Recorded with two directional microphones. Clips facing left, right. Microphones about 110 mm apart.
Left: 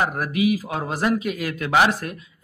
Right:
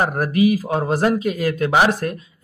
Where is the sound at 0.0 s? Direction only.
40° right (ahead or behind).